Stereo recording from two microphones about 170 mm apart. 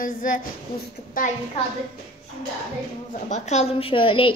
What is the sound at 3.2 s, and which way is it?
A woman's voice, 40° left (ahead or behind).